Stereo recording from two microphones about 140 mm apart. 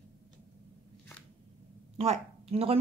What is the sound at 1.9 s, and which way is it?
Speech, 45° right (ahead or behind).